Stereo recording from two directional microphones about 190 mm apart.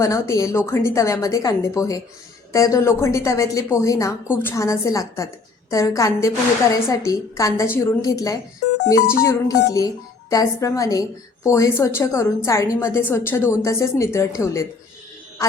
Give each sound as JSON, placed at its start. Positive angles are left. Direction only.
{"t": 0.0, "sound": "a woman's voice", "side_deg": 15}